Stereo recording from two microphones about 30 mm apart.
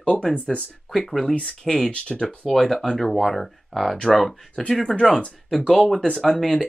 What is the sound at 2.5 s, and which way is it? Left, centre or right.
Speech, centre.